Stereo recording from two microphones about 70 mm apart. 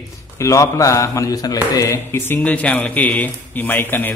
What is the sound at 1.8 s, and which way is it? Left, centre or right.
Speech, left.